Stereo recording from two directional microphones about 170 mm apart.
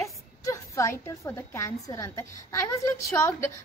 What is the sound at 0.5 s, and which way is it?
A woman's voice, 15° left (ahead or behind).